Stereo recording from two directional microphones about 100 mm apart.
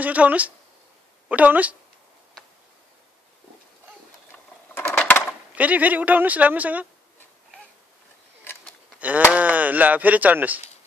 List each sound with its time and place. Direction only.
0.0 s speech: 15° right (ahead or behind)
4.3 s sewing machine: 5° left (ahead or behind)
4.7 s a sound: 20° left (ahead or behind)
5.6 s speech: 15° right (ahead or behind)
9.3 s speech: 15° right (ahead or behind)